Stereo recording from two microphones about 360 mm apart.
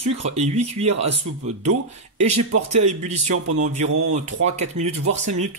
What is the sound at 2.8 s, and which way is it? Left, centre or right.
Speech, centre.